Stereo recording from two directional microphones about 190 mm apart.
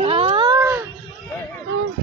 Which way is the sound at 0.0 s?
30° right (ahead or behind).